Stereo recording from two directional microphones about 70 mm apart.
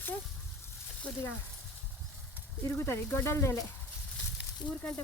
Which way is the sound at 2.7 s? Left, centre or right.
Left.